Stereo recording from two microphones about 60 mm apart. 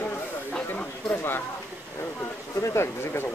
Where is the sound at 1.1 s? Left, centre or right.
Left.